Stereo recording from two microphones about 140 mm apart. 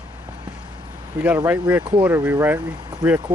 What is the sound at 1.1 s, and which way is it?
Speech, 25° right (ahead or behind).